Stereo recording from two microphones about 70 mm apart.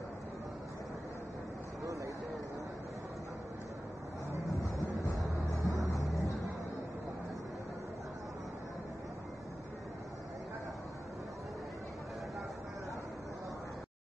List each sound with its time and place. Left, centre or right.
5.5 s vehicle: left